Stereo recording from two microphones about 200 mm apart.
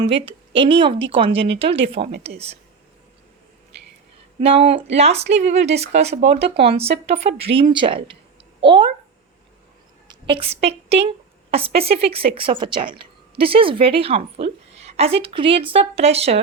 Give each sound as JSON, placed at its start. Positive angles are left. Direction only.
{"t": 0.0, "sound": "speech", "side_deg": -25}
{"t": 4.4, "sound": "speech", "side_deg": -30}
{"t": 10.1, "sound": "a woman's voice", "side_deg": -25}